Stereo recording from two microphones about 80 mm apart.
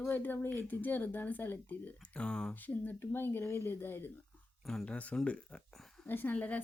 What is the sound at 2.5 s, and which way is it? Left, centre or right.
Speech, left.